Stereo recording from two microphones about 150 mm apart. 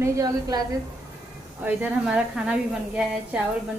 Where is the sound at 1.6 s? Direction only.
10° right (ahead or behind).